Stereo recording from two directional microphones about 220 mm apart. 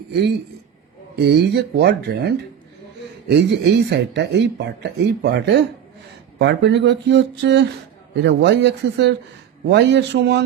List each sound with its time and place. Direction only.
0.1 s a man's voice: 50° right (ahead or behind)